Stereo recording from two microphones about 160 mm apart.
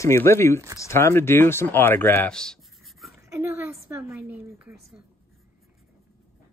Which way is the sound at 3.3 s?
15° right (ahead or behind).